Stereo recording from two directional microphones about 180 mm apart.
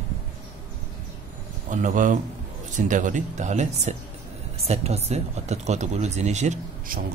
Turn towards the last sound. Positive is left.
turn(degrees=-40)  # may be behind; listen again after turning